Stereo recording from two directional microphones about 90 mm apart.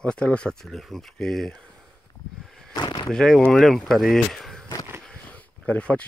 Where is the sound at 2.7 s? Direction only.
55° left (ahead or behind).